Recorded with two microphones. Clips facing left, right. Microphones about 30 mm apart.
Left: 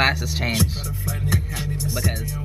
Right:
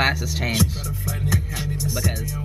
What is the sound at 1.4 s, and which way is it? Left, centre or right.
Music, centre.